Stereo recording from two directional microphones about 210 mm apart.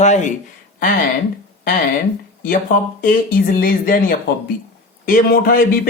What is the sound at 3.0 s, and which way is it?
Speech, 40° left (ahead or behind).